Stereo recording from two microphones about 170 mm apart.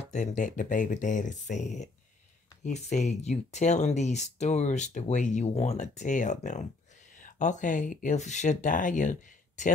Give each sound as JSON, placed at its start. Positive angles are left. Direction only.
{"t": 0.1, "sound": "speech", "side_deg": 45}